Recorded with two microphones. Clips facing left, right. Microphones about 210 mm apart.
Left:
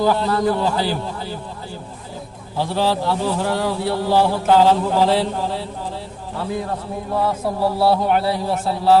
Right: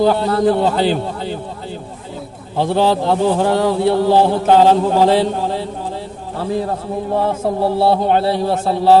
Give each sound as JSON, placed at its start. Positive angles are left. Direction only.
{"t": 0.0, "sound": "a man's voice", "side_deg": -20}
{"t": 2.6, "sound": "a man's voice", "side_deg": -20}
{"t": 3.1, "sound": "a sound", "side_deg": -55}
{"t": 3.4, "sound": "a man's voice", "side_deg": -25}
{"t": 7.1, "sound": "a man's voice", "side_deg": -25}